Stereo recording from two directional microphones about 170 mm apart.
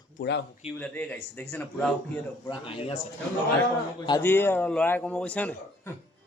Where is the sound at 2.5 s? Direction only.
30° left (ahead or behind).